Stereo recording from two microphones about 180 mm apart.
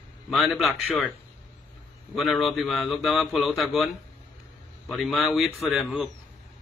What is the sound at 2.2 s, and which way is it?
A man's voice, centre (ahead or behind).